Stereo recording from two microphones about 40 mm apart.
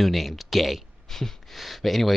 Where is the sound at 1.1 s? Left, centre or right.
Centre.